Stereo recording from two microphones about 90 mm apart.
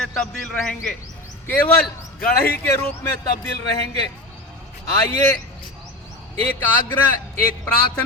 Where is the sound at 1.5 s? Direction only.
20° left (ahead or behind).